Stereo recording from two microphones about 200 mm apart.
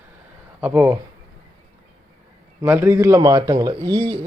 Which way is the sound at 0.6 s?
10° right (ahead or behind).